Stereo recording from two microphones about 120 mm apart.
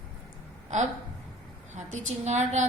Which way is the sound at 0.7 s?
90° right.